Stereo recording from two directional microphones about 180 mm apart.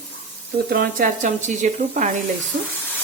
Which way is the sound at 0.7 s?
55° right (ahead or behind).